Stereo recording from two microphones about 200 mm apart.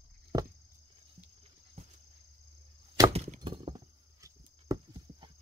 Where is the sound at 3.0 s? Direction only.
20° right (ahead or behind).